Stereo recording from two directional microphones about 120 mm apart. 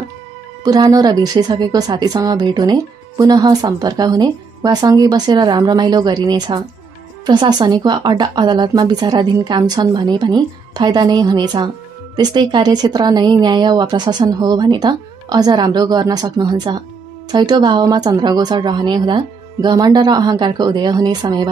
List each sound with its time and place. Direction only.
0.7 s speech: 30° right (ahead or behind)